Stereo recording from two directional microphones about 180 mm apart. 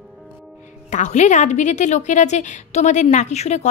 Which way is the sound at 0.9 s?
40° left (ahead or behind).